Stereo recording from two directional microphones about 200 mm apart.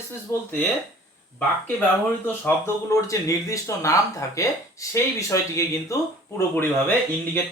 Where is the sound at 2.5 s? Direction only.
15° left (ahead or behind).